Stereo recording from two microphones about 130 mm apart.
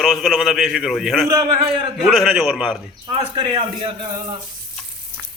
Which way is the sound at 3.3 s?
40° right (ahead or behind).